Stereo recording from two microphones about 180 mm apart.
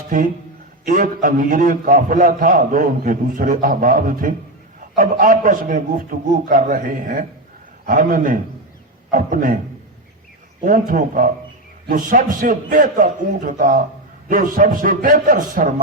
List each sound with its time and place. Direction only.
0.1 s a man's voice: 50° right (ahead or behind)
10.6 s a man's voice: 50° right (ahead or behind)